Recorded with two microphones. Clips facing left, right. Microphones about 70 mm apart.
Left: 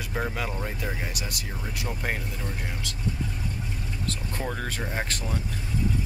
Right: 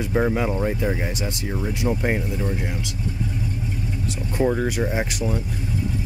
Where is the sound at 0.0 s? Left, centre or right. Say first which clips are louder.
Right 9 dB; right.